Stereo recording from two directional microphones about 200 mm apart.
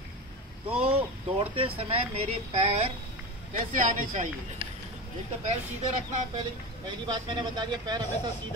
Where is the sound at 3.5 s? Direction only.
40° right (ahead or behind).